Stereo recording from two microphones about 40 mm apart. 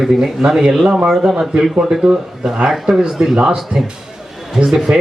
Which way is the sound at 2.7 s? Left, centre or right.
Centre.